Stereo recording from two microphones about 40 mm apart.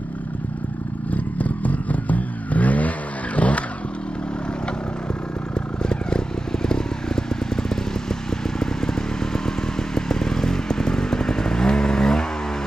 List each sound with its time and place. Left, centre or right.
1.1 s vehicle: left
5.8 s vehicle: left
9.9 s vehicle: centre